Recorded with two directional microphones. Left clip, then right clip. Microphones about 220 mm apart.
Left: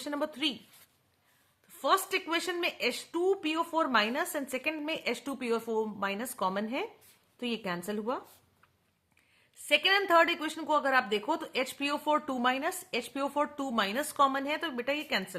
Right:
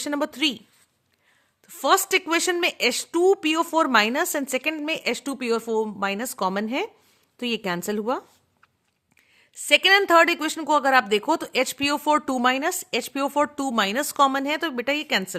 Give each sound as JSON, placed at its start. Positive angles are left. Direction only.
{"t": 0.0, "sound": "a woman's voice", "side_deg": -50}
{"t": 1.6, "sound": "a woman's voice", "side_deg": -50}
{"t": 9.6, "sound": "a woman's voice", "side_deg": -50}